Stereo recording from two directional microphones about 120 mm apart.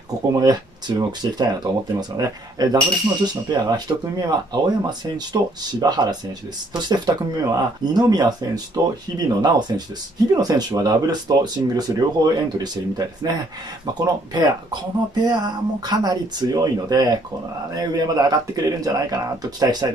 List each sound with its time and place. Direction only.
0.3 s speech: 30° right (ahead or behind)